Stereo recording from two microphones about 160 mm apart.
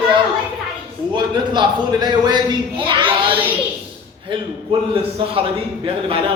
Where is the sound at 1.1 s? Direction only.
30° right (ahead or behind).